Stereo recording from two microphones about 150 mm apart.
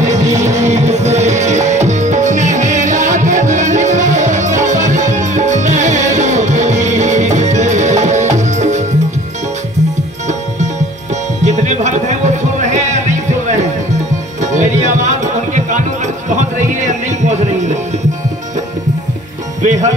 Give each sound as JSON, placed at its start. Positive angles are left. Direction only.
{"t": 0.0, "sound": "music", "side_deg": -50}
{"t": 11.4, "sound": "music", "side_deg": -50}
{"t": 16.3, "sound": "a sound", "side_deg": -55}
{"t": 19.6, "sound": "music", "side_deg": -55}